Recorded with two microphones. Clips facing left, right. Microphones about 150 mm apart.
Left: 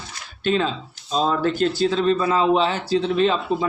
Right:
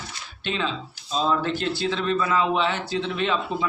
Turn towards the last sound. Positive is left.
turn(degrees=35)  # may be behind; listen again after turning